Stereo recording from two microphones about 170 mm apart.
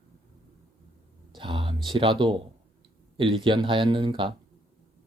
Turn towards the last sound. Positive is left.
turn(degrees=-30)  # may be behind; listen again after turning